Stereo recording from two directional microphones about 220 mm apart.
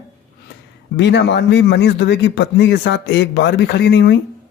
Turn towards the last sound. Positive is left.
turn(degrees=45)  # may be behind; listen again after turning